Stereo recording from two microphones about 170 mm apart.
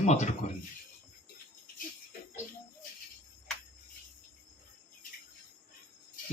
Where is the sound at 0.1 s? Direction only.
45° left (ahead or behind).